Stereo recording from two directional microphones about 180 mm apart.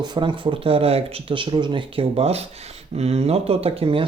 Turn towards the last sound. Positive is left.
turn(degrees=-30)  # may be behind; listen again after turning